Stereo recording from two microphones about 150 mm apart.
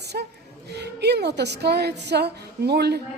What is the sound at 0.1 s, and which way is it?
A woman's voice, 80° right.